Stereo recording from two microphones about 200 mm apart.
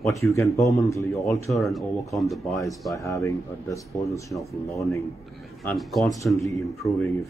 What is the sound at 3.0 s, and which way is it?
Speech, 15° left (ahead or behind).